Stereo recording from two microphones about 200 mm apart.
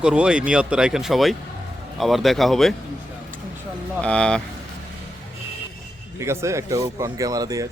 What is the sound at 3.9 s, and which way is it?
Speech, 5° left (ahead or behind).